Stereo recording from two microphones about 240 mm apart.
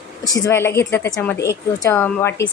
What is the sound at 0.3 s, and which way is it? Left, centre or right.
A woman's voice, centre.